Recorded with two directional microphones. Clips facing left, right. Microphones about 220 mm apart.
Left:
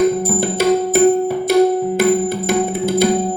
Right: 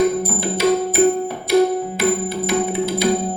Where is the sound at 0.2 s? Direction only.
50° left (ahead or behind).